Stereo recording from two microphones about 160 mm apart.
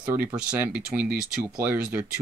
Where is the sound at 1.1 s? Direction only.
65° right (ahead or behind).